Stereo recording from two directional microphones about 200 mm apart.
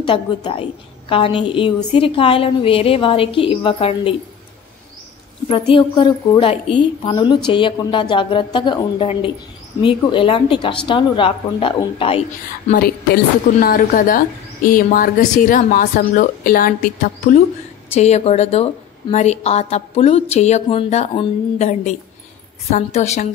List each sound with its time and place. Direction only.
0.0 s a woman's voice: 25° left (ahead or behind)
5.5 s a woman's voice: 25° left (ahead or behind)
12.8 s a woman's voice: 50° left (ahead or behind)
17.9 s a woman's voice: 30° left (ahead or behind)